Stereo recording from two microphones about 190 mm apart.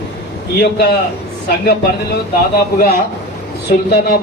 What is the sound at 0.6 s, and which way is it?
Speech, 60° left (ahead or behind).